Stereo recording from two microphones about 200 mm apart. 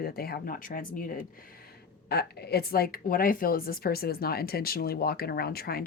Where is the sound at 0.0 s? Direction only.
50° left (ahead or behind).